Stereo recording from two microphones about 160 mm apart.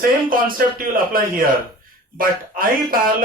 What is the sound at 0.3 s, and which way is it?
Speech, 60° right (ahead or behind).